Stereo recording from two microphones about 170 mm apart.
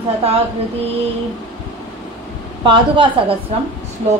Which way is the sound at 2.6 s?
30° right (ahead or behind).